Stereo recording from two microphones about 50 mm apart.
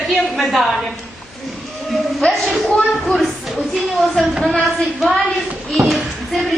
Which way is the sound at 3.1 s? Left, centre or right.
Centre.